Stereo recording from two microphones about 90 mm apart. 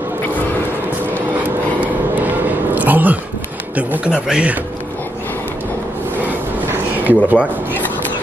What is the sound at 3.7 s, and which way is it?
Speech, 15° right (ahead or behind).